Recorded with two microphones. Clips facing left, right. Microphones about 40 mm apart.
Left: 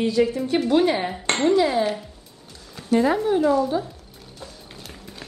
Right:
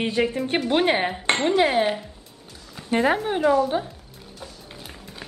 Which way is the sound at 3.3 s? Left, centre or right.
Right.